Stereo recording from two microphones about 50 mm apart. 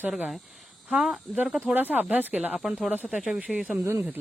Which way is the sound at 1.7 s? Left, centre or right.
Right.